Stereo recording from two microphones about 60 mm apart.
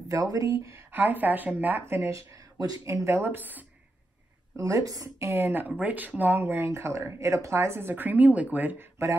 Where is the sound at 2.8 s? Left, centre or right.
Right.